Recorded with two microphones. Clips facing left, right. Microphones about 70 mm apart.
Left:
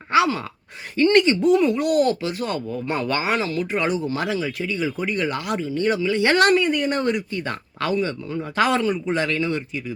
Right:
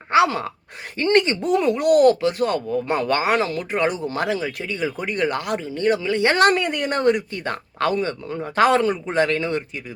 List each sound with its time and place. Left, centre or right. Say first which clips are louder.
0.1 s a sound: right 2 dB; right
0.9 s speech: left 2 dB; right
6.2 s speech: even; right
6.6 s speech: left 1 dB; right